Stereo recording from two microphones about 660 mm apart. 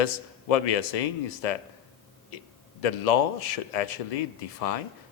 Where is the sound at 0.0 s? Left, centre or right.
Left.